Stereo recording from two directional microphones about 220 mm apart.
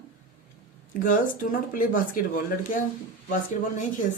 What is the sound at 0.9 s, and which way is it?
Speech, 35° left (ahead or behind).